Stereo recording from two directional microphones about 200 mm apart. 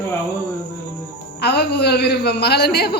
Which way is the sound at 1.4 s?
55° left (ahead or behind).